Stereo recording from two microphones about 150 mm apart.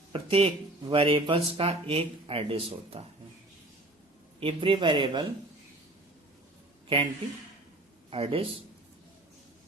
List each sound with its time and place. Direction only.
0.1 s speech: 40° right (ahead or behind)
4.4 s speech: 35° right (ahead or behind)
6.8 s speech: 40° right (ahead or behind)
8.1 s speech: 40° right (ahead or behind)